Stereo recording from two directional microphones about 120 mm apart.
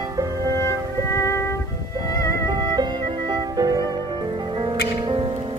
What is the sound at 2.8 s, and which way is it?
Music, 35° right (ahead or behind).